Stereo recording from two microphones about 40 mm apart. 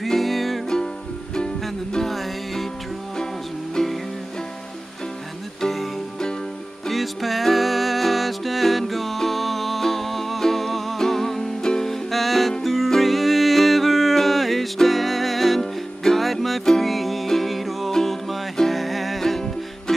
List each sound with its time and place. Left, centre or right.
0.0 s music: centre
1.3 s music: centre
2.0 s music: centre
3.7 s music: centre
5.6 s music: centre
6.9 s music: centre